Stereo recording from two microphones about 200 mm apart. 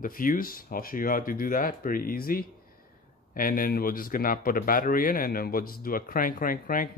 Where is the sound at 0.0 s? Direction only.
45° left (ahead or behind).